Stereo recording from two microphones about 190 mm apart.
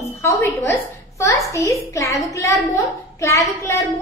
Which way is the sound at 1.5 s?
15° left (ahead or behind).